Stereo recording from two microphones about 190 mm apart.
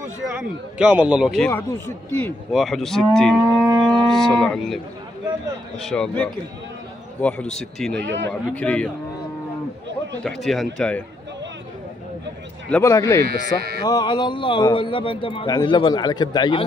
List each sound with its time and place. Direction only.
0.7 s moo: 5° right (ahead or behind)
2.5 s moo: centre (ahead or behind)
3.8 s cattle: centre (ahead or behind)
5.8 s moo: 5° left (ahead or behind)
7.2 s a man's voice: 5° left (ahead or behind)
7.5 s moo: centre (ahead or behind)
8.0 s speech: 70° right (ahead or behind)
8.3 s a man's voice: 5° left (ahead or behind)
10.4 s moo: centre (ahead or behind)
12.6 s a man's voice: 10° left (ahead or behind)
13.2 s speech: 55° right (ahead or behind)
13.8 s a man's voice: 20° left (ahead or behind)